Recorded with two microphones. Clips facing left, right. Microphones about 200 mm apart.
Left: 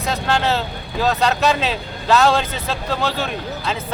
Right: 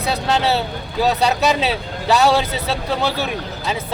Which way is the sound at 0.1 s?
15° right (ahead or behind).